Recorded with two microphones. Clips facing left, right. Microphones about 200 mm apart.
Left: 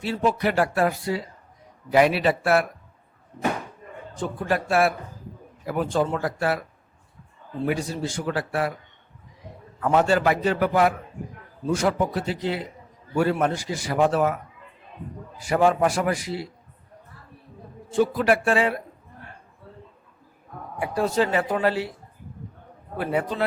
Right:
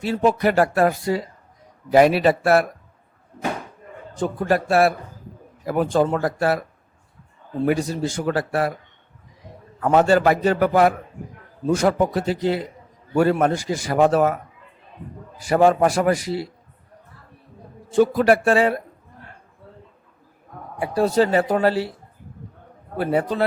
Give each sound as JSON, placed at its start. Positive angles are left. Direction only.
{"t": 0.0, "sound": "a man's voice", "side_deg": -45}
{"t": 4.2, "sound": "a man's voice", "side_deg": -40}
{"t": 7.7, "sound": "speech", "side_deg": -45}
{"t": 9.8, "sound": "a man's voice", "side_deg": -40}
{"t": 15.4, "sound": "a man's voice", "side_deg": -40}
{"t": 17.9, "sound": "a man's voice", "side_deg": -45}
{"t": 20.7, "sound": "a man's voice", "side_deg": -30}
{"t": 23.0, "sound": "a man's voice", "side_deg": -35}